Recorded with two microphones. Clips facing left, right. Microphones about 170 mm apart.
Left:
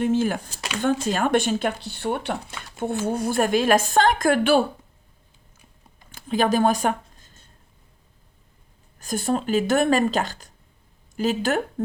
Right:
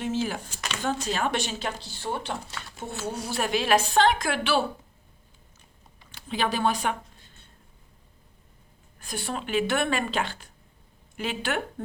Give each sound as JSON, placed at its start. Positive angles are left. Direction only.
{"t": 0.0, "sound": "a woman's voice", "side_deg": 50}
{"t": 6.0, "sound": "a sound", "side_deg": 45}
{"t": 9.0, "sound": "speech", "side_deg": 40}